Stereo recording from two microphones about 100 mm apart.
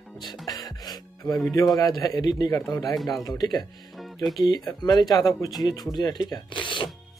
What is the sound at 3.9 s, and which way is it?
Music, centre (ahead or behind).